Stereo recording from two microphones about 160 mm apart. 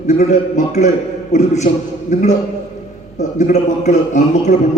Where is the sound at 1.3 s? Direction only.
45° left (ahead or behind).